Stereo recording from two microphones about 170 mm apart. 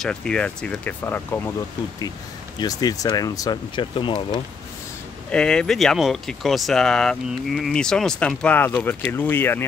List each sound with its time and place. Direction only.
0.0 s speech: 5° left (ahead or behind)
2.6 s speech: 20° left (ahead or behind)
5.3 s speech: 5° left (ahead or behind)